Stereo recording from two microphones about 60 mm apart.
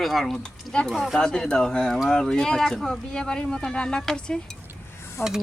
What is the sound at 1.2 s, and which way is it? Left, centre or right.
Speech, centre.